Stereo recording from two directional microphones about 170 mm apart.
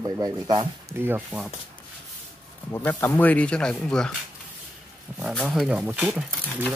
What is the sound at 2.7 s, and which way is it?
Speech, 15° left (ahead or behind).